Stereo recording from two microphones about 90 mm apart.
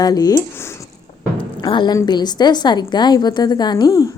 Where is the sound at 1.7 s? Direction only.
60° left (ahead or behind).